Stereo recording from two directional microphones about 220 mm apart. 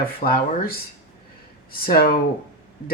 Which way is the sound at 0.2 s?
35° left (ahead or behind).